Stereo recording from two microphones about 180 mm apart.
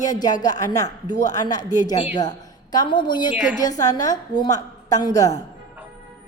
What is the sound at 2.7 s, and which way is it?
A woman's voice, 25° left (ahead or behind).